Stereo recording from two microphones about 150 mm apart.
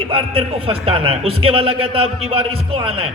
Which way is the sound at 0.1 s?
35° right (ahead or behind).